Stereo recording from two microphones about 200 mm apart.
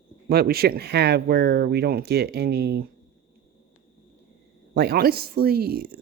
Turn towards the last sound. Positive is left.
turn(degrees=-50)  # may be behind; listen again after turning